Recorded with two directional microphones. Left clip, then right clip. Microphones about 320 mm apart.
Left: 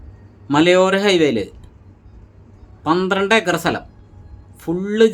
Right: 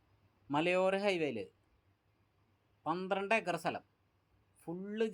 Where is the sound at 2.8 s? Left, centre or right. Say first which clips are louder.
Left 19 dB; centre.